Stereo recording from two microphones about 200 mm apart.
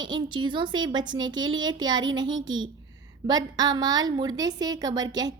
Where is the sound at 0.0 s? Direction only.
20° right (ahead or behind).